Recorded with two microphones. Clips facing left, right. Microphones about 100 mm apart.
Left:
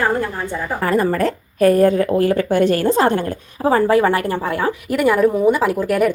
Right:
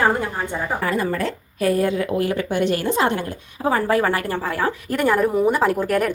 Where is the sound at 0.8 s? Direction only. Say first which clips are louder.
Left 8 dB; 45° left (ahead or behind).